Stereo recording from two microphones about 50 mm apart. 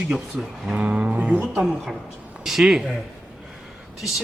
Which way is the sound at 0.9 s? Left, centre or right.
Right.